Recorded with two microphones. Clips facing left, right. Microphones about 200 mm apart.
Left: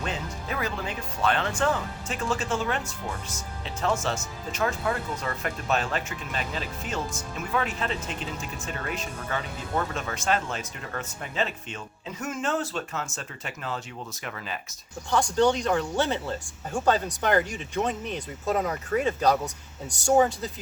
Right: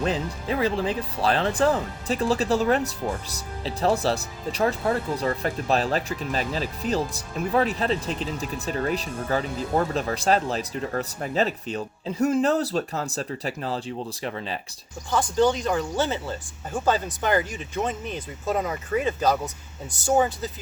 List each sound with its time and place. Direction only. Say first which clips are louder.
0.0 s speech: right 7 dB; 30° right (ahead or behind)
15.1 s speech: right 1 dB; centre (ahead or behind)